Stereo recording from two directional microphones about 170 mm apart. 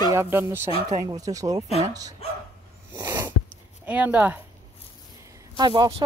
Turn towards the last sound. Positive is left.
turn(degrees=-30)  # may be behind; listen again after turning